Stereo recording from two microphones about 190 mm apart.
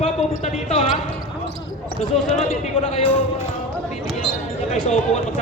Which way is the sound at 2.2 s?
35° left (ahead or behind).